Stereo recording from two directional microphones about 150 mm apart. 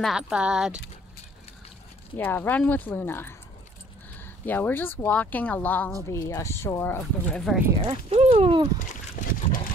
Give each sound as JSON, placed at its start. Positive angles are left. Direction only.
{"t": 0.0, "sound": "speech", "side_deg": -5}
{"t": 2.1, "sound": "speech", "side_deg": 15}
{"t": 4.5, "sound": "speech", "side_deg": 10}
{"t": 7.7, "sound": "speech", "side_deg": -40}
{"t": 9.2, "sound": "boat", "side_deg": 75}